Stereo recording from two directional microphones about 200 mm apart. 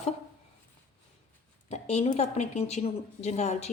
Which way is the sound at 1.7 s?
35° left (ahead or behind).